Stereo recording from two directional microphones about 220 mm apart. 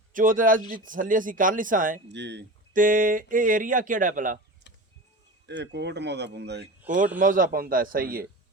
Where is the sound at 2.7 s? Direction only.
40° right (ahead or behind).